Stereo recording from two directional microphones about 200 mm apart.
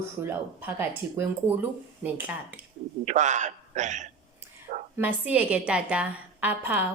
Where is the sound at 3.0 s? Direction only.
35° right (ahead or behind).